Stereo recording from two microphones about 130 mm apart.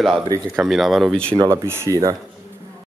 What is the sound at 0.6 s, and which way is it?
Speech, centre (ahead or behind).